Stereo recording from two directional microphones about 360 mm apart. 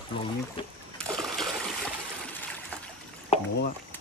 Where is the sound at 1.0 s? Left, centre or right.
Centre.